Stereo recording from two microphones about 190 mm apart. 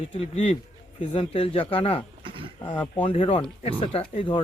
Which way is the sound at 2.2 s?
25° right (ahead or behind).